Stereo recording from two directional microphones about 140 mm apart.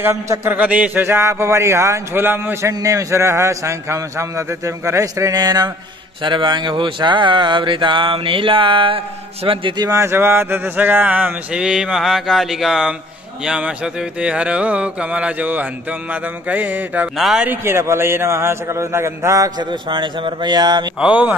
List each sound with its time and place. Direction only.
0.0 s a man's voice: 20° right (ahead or behind); by 9.8 s 35° right (ahead or behind)
9.8 s speech: 20° right (ahead or behind); by 17.5 s 5° right (ahead or behind)
17.5 s a man's voice: 15° right (ahead or behind)
21.0 s speech: 10° right (ahead or behind)